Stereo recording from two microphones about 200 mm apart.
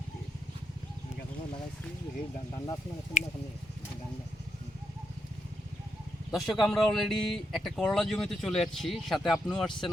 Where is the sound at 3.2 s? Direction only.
40° left (ahead or behind).